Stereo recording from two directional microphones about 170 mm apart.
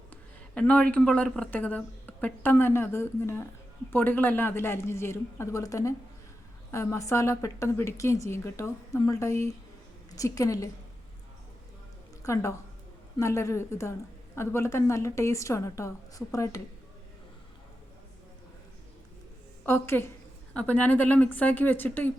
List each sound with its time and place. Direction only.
0.1 s a woman's voice: 10° left (ahead or behind)
12.2 s a woman's voice: 15° left (ahead or behind)
19.6 s a woman's voice: 15° left (ahead or behind)